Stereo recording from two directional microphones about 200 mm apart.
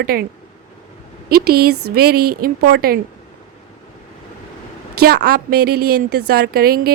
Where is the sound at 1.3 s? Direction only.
50° right (ahead or behind).